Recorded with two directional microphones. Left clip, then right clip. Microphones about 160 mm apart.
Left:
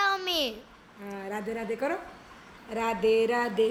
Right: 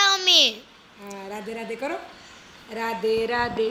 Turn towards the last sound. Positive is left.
turn(degrees=30)  # may be behind; listen again after turning